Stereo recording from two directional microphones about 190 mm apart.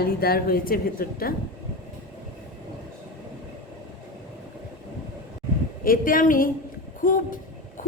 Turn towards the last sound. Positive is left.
turn(degrees=45)  # may be behind; listen again after turning